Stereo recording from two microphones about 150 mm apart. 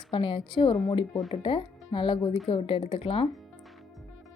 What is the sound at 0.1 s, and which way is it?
Speech, 35° left (ahead or behind).